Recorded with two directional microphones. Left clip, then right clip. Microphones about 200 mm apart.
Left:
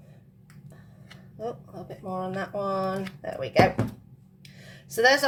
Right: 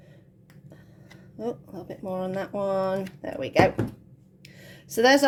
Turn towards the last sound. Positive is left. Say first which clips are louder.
# right 1 dB
turn(degrees=-50)  # may be behind; listen again after turning